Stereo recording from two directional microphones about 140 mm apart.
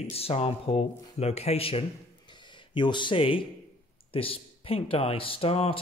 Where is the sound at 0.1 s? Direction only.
45° left (ahead or behind).